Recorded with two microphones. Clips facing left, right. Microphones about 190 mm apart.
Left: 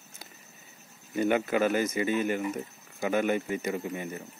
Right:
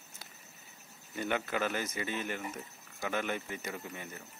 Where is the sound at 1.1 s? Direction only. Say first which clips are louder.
Left 8 dB; 10° left (ahead or behind).